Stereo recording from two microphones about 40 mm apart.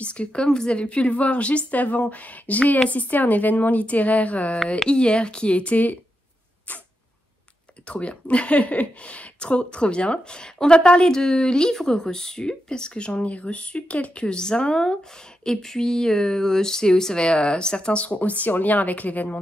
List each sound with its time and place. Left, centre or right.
0.0 s a woman's voice: left
4.8 s a woman's voice: left
7.8 s a woman's voice: left
14.2 s a woman's voice: left